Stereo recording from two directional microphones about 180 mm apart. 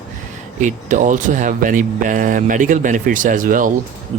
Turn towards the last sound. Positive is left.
turn(degrees=-50)  # may be behind; listen again after turning